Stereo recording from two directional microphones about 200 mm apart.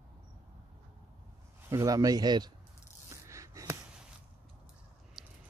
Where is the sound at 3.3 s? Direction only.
15° right (ahead or behind).